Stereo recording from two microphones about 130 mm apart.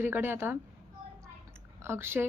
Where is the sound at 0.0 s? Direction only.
15° right (ahead or behind).